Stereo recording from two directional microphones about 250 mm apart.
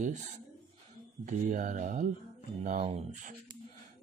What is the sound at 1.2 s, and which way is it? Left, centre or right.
Speech, right.